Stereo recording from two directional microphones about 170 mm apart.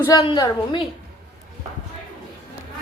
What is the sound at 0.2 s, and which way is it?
Speech, 30° left (ahead or behind).